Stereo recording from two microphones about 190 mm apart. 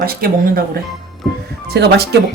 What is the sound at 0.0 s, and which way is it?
Speech, 50° right (ahead or behind).